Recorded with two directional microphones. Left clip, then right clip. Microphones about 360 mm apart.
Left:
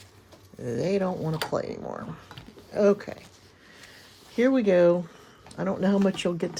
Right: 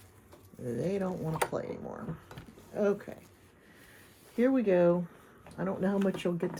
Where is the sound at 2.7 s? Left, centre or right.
Left.